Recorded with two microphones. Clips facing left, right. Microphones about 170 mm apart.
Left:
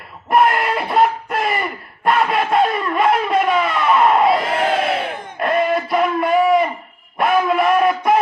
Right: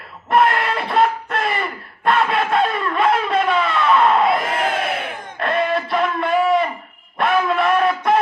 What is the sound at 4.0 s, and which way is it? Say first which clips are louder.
Crowd: left 3 dB; 20° left (ahead or behind).